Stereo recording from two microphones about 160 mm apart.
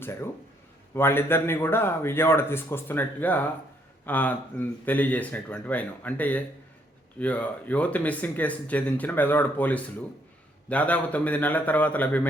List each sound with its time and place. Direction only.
0.0 s a man's voice: 15° left (ahead or behind)